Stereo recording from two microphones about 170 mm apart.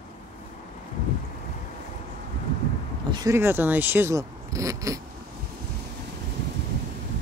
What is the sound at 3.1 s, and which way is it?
Speech, 15° right (ahead or behind).